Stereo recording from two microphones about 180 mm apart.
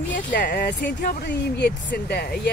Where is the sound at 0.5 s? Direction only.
65° left (ahead or behind).